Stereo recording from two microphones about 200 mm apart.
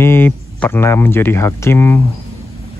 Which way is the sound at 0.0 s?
10° left (ahead or behind).